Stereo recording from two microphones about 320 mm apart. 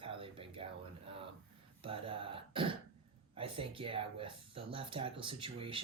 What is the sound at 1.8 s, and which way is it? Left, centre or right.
Speech, centre.